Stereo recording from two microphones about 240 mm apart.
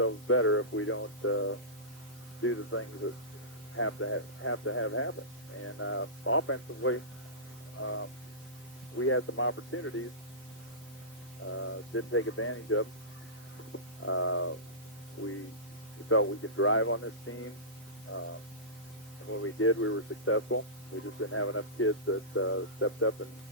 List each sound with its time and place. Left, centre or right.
0.0 s speech: left
11.9 s speech: left
14.0 s speech: left
16.0 s speech: left
19.3 s speech: left